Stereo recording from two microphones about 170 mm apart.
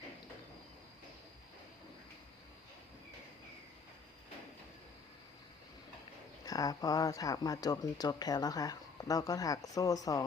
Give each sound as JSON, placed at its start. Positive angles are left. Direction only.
{"t": 6.4, "sound": "speech", "side_deg": 20}